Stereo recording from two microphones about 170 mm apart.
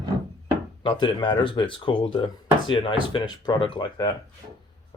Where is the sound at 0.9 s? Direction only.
25° left (ahead or behind).